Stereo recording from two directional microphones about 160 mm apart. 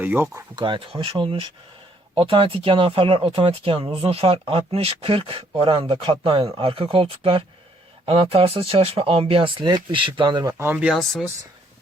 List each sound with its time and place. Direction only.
0.0 s speech: 15° right (ahead or behind)
0.5 s speech: 30° right (ahead or behind)
10.6 s speech: 10° right (ahead or behind)